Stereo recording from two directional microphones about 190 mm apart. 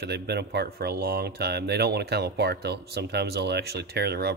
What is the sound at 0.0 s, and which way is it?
Speech, 60° right (ahead or behind).